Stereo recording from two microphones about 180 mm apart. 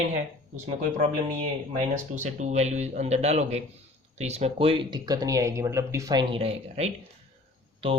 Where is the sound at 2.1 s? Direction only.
40° right (ahead or behind).